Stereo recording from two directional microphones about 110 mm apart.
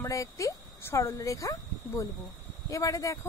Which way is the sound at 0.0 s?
30° left (ahead or behind).